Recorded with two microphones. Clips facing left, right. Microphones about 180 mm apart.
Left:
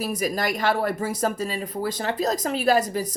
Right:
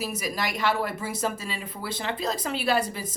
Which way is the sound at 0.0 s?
45° left (ahead or behind).